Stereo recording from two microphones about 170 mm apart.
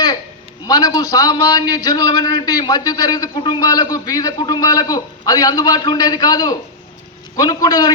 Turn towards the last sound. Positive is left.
turn(degrees=25)  # may be behind; listen again after turning